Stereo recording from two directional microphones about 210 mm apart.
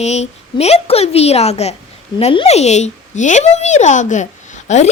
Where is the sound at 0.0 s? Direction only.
30° left (ahead or behind).